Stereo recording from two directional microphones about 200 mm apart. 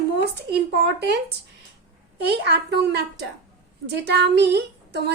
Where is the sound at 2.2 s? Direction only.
55° right (ahead or behind).